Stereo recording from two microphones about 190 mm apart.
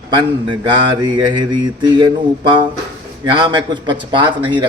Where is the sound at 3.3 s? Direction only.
25° right (ahead or behind).